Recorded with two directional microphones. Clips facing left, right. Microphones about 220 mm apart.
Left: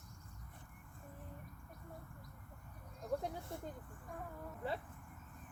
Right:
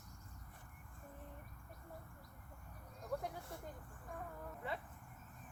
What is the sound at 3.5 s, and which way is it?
Speech, 25° left (ahead or behind).